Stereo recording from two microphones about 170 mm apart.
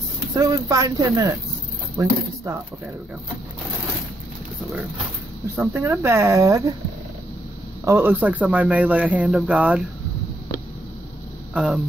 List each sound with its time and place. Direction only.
0.3 s speech: 20° right (ahead or behind)
5.6 s speech: 15° right (ahead or behind)
7.8 s speech: 15° right (ahead or behind)
11.5 s speech: 5° right (ahead or behind)